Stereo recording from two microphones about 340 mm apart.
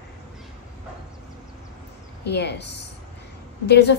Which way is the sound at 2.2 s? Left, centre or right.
Left.